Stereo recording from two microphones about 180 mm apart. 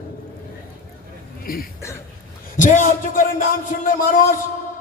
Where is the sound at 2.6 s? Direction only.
45° left (ahead or behind).